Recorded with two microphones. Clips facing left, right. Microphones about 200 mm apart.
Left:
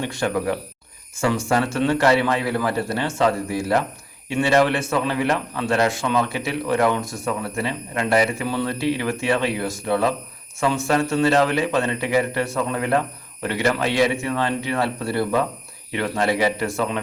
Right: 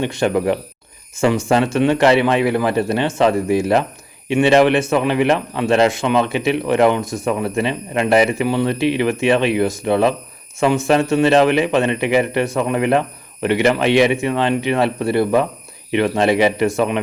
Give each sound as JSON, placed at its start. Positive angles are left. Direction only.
{"t": 0.0, "sound": "a man's voice", "side_deg": -20}